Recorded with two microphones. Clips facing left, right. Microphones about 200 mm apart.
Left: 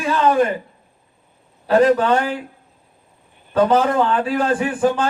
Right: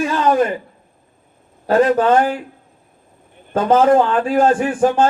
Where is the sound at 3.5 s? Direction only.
45° right (ahead or behind).